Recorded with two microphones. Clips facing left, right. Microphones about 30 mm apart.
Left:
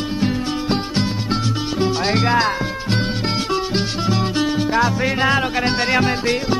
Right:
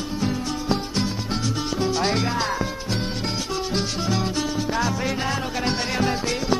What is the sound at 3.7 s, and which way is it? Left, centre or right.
Music, left.